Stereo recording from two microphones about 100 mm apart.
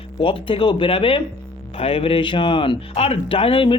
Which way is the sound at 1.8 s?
75° left (ahead or behind).